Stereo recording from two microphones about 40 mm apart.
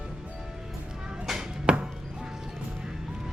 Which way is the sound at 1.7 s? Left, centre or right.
Right.